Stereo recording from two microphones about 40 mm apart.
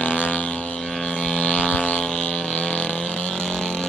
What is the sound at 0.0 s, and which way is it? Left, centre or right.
Vehicle, left.